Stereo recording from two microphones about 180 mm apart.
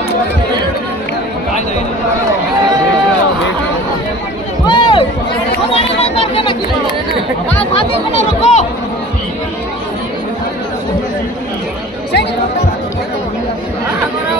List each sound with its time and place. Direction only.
4.6 s music: 25° left (ahead or behind)
5.7 s chatter: 35° left (ahead or behind)
8.4 s speech: 40° left (ahead or behind)